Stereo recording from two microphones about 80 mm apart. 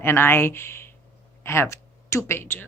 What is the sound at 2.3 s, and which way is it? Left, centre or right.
Speech, left.